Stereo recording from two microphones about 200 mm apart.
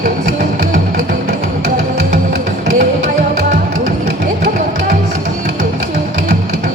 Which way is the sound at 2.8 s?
45° right (ahead or behind).